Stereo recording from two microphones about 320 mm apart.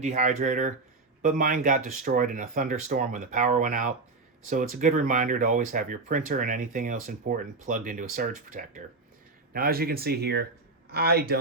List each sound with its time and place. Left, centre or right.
0.0 s speech: right